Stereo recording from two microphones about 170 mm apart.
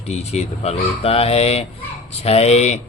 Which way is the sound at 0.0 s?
40° left (ahead or behind).